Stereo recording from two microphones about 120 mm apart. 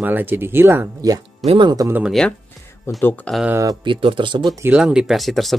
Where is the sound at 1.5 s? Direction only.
40° right (ahead or behind).